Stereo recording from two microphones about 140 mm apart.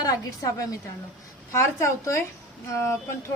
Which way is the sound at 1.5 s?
20° left (ahead or behind).